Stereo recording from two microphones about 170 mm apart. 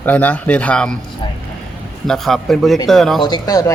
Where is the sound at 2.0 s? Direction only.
Centre (ahead or behind).